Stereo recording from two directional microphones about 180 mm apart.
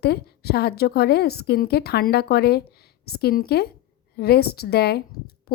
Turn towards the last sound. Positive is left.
turn(degrees=65)  # may be behind; listen again after turning